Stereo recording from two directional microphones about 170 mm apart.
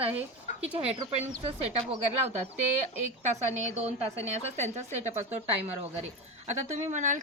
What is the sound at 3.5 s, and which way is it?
A woman's voice, 40° right (ahead or behind).